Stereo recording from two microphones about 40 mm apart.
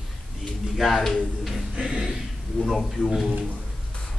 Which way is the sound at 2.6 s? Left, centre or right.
Centre.